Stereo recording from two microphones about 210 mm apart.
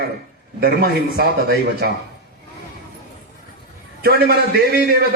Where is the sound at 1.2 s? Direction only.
45° right (ahead or behind).